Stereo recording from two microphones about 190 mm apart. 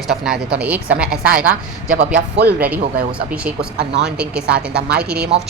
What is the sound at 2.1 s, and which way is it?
Speech, 65° right (ahead or behind).